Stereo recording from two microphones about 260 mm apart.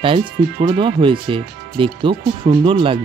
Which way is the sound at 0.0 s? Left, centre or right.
Right.